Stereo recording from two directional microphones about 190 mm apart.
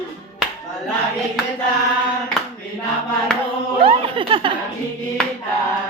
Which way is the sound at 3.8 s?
30° right (ahead or behind).